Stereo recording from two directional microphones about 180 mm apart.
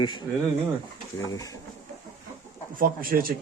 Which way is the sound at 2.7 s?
55° right (ahead or behind).